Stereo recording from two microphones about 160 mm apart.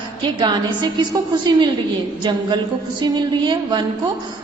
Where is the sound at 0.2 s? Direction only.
30° right (ahead or behind).